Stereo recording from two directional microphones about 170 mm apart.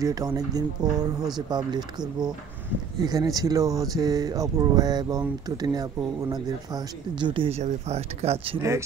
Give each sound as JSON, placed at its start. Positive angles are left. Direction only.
{"t": 0.0, "sound": "speech", "side_deg": -20}